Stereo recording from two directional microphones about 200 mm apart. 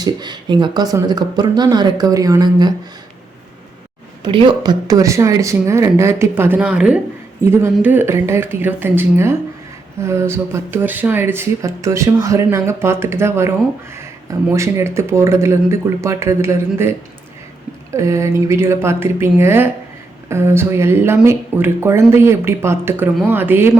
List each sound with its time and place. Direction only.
0.0 s speech: 20° right (ahead or behind)
4.2 s speech: 20° right (ahead or behind)
17.9 s speech: 15° right (ahead or behind)